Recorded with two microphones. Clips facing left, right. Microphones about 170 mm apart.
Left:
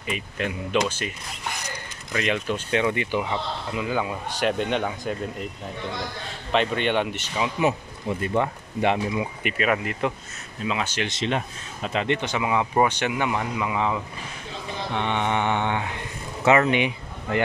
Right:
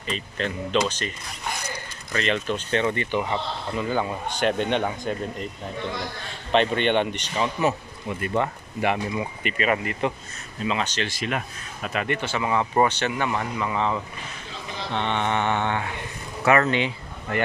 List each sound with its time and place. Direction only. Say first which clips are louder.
0.0 s speech: even; 10° left (ahead or behind)
2.1 s speech: even; 10° left (ahead or behind)
6.5 s speech: right 2 dB; 5° left (ahead or behind)
8.1 s speech: left 1 dB; 30° left (ahead or behind)
9.1 s speech: left 1 dB; 10° left (ahead or behind)
11.0 s speech: left 2 dB; 20° left (ahead or behind)